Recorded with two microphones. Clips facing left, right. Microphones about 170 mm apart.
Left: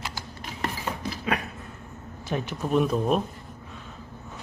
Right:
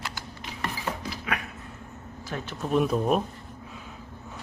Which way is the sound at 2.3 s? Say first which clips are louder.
Left 6 dB; 20° left (ahead or behind).